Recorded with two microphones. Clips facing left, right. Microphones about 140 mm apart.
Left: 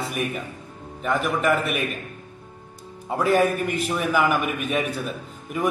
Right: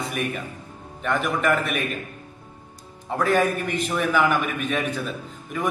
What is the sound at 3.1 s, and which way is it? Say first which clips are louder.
A man's voice: left 1 dB; 5° left (ahead or behind).